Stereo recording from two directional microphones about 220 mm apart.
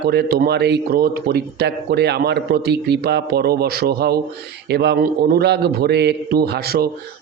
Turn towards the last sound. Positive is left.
turn(degrees=-45)  # may be behind; listen again after turning